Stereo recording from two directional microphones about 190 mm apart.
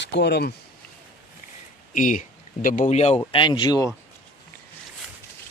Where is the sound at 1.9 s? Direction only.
45° left (ahead or behind); by 3.9 s 20° left (ahead or behind).